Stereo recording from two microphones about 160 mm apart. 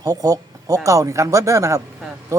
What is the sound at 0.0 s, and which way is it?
Speech, 20° right (ahead or behind).